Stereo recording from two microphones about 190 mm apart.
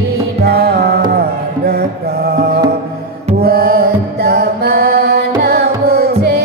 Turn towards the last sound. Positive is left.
turn(degrees=-60)  # may be behind; listen again after turning